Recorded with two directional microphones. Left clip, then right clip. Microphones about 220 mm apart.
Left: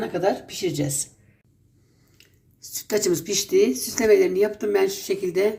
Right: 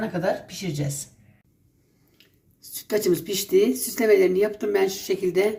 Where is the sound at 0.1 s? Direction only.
40° left (ahead or behind).